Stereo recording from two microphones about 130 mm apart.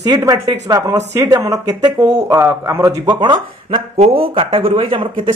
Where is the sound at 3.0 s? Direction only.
35° right (ahead or behind).